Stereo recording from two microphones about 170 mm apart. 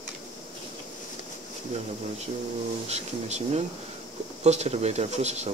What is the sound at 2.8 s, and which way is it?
Speech, 40° right (ahead or behind).